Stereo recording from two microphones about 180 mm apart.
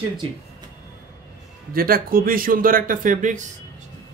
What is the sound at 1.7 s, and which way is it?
A man's voice, 55° right (ahead or behind).